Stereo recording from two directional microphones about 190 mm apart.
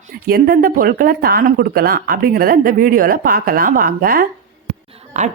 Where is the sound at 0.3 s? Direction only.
55° right (ahead or behind).